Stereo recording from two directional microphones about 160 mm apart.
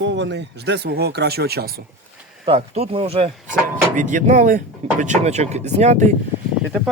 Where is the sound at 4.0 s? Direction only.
50° right (ahead or behind).